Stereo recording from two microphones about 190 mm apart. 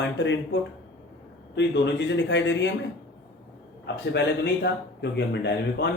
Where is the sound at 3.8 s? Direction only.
60° left (ahead or behind).